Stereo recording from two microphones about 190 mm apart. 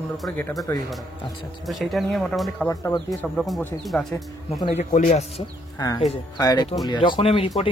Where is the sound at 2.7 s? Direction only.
20° left (ahead or behind).